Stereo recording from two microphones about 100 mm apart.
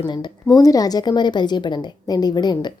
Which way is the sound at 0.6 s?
40° left (ahead or behind).